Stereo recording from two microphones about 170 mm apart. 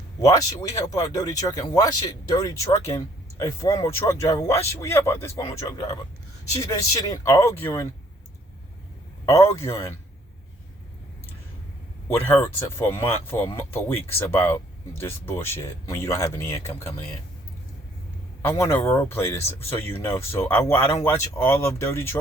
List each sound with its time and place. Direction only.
0.2 s speech: 20° left (ahead or behind)
5.3 s speech: 30° left (ahead or behind)
5.5 s speech: 20° left (ahead or behind)
7.0 s speech: 20° left (ahead or behind)
9.3 s speech: 15° left (ahead or behind)
12.2 s speech: 10° left (ahead or behind)
18.4 s speech: 15° left (ahead or behind)